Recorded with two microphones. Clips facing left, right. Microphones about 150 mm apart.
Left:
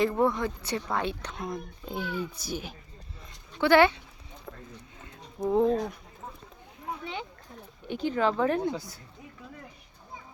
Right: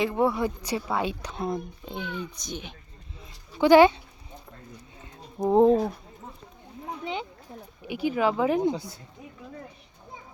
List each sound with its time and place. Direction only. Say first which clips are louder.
0.0 s speech: right 1 dB; 5° right (ahead or behind)
1.4 s speech: right 9 dB; 25° right (ahead or behind)
1.8 s a child's voice: left 1 dB; 5° left (ahead or behind)
3.5 s speech: right 5 dB; 15° right (ahead or behind)
5.5 s speech: right 5 dB; 30° right (ahead or behind)
7.9 s speech: right 2 dB; 10° right (ahead or behind)